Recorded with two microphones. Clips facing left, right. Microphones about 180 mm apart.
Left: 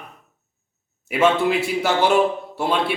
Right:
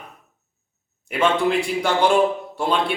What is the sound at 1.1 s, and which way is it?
A man's voice, 5° left (ahead or behind).